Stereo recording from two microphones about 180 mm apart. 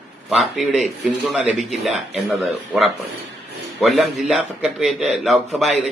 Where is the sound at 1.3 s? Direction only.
5° right (ahead or behind).